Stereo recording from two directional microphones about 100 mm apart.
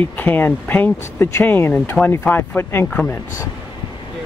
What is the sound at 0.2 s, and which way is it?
Speech, 20° left (ahead or behind).